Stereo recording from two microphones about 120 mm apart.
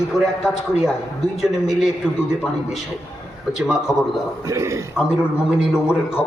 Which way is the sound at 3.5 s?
5° right (ahead or behind).